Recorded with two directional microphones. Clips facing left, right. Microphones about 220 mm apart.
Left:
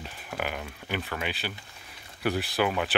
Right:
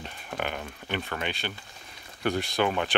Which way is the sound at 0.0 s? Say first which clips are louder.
Right 1 dB; 5° left (ahead or behind).